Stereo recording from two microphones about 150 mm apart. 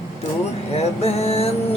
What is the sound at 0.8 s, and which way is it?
Mantra, 45° left (ahead or behind).